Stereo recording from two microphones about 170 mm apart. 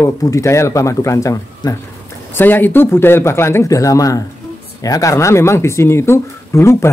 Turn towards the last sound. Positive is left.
turn(degrees=15)  # may be behind; listen again after turning